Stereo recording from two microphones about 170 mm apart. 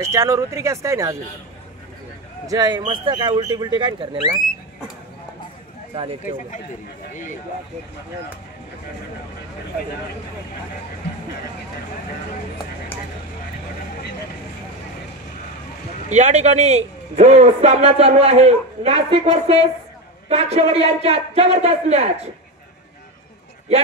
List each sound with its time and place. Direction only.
0.0 s speech: 15° right (ahead or behind)
2.4 s speech: 20° right (ahead or behind)
16.1 s a man's voice: 45° right (ahead or behind)